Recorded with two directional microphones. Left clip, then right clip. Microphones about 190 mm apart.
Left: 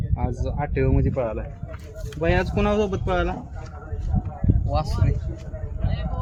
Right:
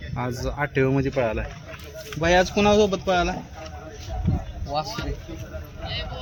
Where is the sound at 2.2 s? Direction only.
60° right (ahead or behind).